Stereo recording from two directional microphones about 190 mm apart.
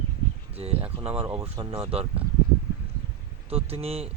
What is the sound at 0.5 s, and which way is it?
Speech, 30° right (ahead or behind).